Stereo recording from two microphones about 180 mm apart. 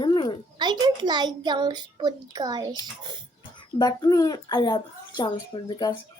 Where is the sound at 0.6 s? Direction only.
25° right (ahead or behind).